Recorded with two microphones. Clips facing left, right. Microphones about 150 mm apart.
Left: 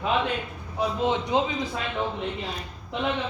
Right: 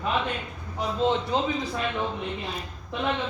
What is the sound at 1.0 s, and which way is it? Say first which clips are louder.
Speech: right 1 dB; 15° left (ahead or behind).